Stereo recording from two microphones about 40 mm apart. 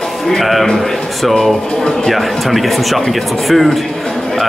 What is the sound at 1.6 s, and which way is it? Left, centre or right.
Speech, centre.